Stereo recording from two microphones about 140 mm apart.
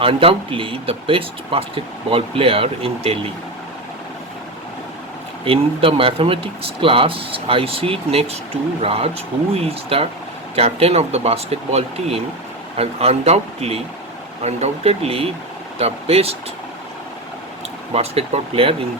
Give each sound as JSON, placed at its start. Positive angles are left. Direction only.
{"t": 0.0, "sound": "speech", "side_deg": -40}
{"t": 5.5, "sound": "speech", "side_deg": -40}
{"t": 17.9, "sound": "speech", "side_deg": -45}